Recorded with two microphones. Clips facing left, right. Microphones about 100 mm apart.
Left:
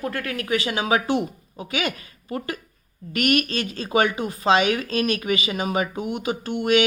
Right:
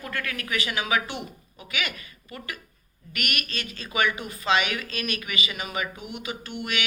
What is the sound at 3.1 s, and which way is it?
A woman's voice, 35° left (ahead or behind).